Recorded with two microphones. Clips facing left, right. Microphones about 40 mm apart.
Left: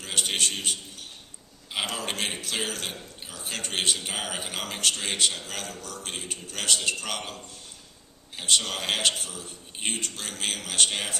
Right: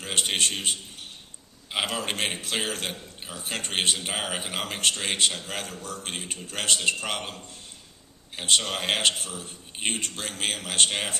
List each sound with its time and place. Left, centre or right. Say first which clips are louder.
0.0 s a man's voice: right 1 dB; right
1.7 s a man's voice: right 2 dB; centre
2.1 s a man's voice: right 2 dB; right
2.9 s speech: right 2 dB; right
3.4 s a man's voice: right 1 dB; right
8.4 s a man's voice: right 1 dB; right